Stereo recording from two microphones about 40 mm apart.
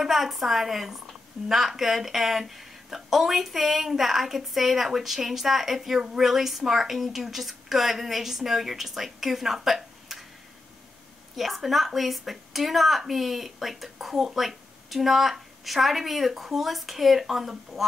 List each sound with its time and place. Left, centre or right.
0.0 s a woman's voice: centre
11.3 s speech: centre